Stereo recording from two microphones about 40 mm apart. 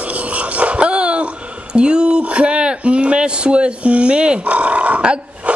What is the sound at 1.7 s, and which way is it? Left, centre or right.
Speech, right.